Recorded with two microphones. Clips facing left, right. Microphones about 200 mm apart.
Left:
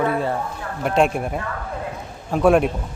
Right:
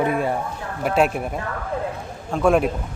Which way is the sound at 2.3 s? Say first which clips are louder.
Left 2 dB; centre (ahead or behind).